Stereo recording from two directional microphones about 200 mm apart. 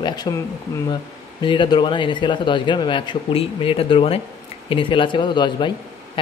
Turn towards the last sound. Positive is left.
turn(degrees=25)  # may be behind; listen again after turning